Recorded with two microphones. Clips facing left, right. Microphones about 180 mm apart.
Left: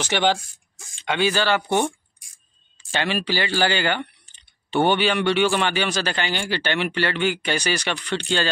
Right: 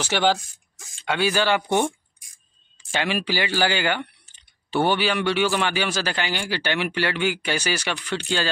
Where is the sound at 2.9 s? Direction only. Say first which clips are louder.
Left 1 dB; 10° right (ahead or behind).